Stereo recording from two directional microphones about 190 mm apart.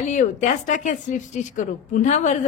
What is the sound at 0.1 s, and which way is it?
A woman's voice, 40° left (ahead or behind).